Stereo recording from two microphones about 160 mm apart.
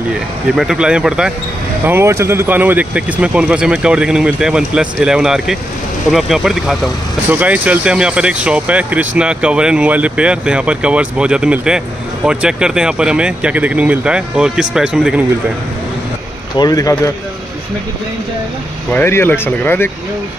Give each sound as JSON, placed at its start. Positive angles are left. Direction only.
{"t": 0.6, "sound": "speech", "side_deg": -5}
{"t": 1.9, "sound": "speech", "side_deg": -15}
{"t": 16.5, "sound": "a man's voice", "side_deg": 25}
{"t": 18.9, "sound": "speech", "side_deg": 15}